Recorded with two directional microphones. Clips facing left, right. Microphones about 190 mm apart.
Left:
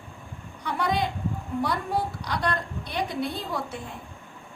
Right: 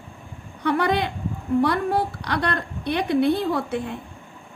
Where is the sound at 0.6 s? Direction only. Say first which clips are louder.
Right 5 dB; 65° right (ahead or behind).